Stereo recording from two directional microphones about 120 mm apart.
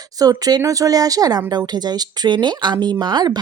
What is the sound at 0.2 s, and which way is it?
Speech, 30° right (ahead or behind).